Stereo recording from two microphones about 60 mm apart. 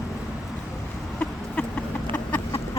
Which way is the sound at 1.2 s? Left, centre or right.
Left.